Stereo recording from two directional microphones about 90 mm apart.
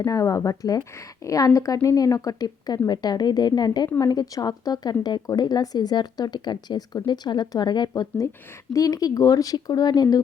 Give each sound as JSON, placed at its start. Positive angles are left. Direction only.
{"t": 0.0, "sound": "speech", "side_deg": 40}
{"t": 3.8, "sound": "speech", "side_deg": 30}
{"t": 4.1, "sound": "speech", "side_deg": 50}
{"t": 8.7, "sound": "speech", "side_deg": 40}